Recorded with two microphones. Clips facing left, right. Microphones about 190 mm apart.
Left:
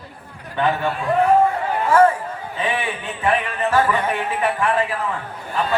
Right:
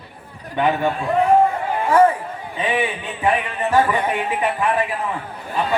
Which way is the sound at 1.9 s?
15° right (ahead or behind).